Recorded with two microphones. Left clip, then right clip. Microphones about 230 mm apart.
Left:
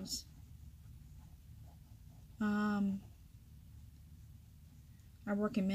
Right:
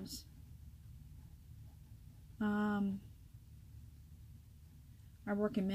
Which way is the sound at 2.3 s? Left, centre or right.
Centre.